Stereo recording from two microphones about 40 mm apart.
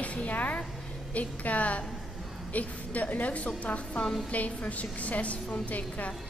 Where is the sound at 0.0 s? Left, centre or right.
Left.